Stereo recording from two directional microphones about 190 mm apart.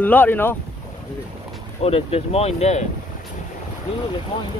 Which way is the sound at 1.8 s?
30° left (ahead or behind).